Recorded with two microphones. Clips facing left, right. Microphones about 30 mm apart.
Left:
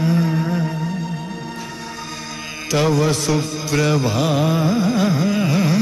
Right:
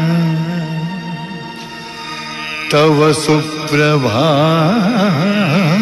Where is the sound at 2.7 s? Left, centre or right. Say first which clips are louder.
Right 7 dB; right.